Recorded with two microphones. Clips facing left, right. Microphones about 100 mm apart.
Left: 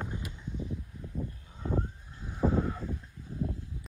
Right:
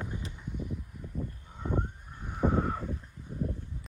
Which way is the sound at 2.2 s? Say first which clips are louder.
Even; 55° right (ahead or behind).